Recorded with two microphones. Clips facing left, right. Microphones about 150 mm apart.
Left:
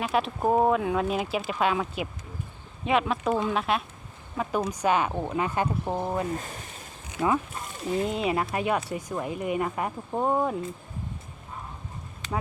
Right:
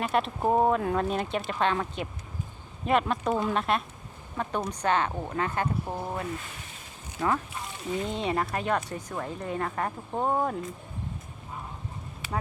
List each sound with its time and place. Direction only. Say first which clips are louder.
0.0 s speech: left 1 dB; centre (ahead or behind); by 6.2 s 25° left (ahead or behind)
6.3 s speech: left 5 dB; 40° left (ahead or behind)
8.0 s speech: even; 5° left (ahead or behind)
10.2 s speech: left 2 dB; centre (ahead or behind)